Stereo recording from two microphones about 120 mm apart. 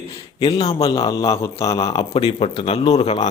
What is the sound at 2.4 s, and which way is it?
Speech, 50° left (ahead or behind).